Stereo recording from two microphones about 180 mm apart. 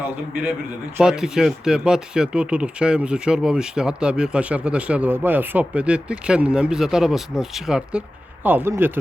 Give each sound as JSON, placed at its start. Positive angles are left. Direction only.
{"t": 0.9, "sound": "speech", "side_deg": -5}